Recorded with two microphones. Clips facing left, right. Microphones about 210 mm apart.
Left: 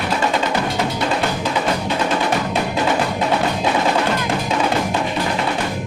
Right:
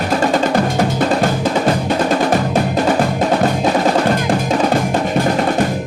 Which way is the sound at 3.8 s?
45° right (ahead or behind).